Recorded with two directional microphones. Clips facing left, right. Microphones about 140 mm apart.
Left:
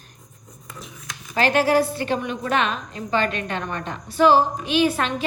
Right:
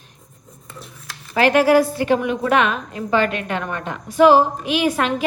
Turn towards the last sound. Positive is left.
turn(degrees=30)  # may be behind; listen again after turning